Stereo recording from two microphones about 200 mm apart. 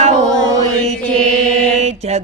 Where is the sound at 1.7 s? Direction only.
35° right (ahead or behind).